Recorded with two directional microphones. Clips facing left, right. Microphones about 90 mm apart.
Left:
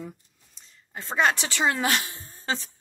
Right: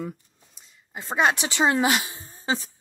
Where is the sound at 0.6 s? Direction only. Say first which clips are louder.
Right 1 dB; 15° right (ahead or behind).